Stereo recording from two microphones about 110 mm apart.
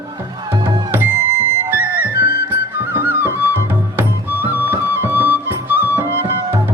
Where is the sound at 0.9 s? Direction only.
20° right (ahead or behind).